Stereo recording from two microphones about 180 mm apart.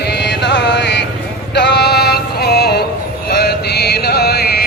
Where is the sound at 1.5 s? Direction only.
70° left (ahead or behind).